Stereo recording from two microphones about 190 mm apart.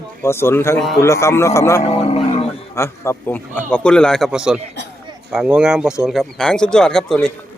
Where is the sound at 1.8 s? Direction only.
30° left (ahead or behind).